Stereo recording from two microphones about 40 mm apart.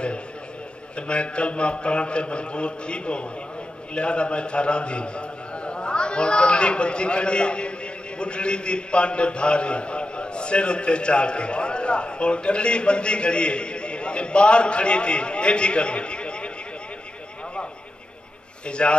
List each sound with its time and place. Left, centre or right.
0.9 s a man's voice: left
18.7 s a man's voice: left